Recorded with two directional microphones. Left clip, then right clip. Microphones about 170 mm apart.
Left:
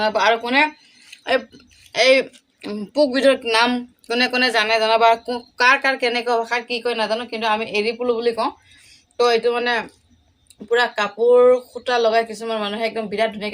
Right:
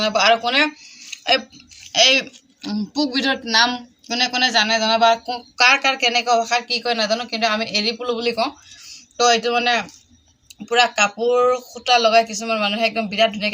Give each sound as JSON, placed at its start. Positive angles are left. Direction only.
{"t": 0.0, "sound": "speech", "side_deg": 20}
{"t": 1.1, "sound": "a sound", "side_deg": 20}
{"t": 1.9, "sound": "speech", "side_deg": 35}
{"t": 2.6, "sound": "speech", "side_deg": 55}
{"t": 5.5, "sound": "speech", "side_deg": 30}